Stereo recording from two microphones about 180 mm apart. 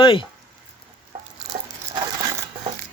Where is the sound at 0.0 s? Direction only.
30° left (ahead or behind).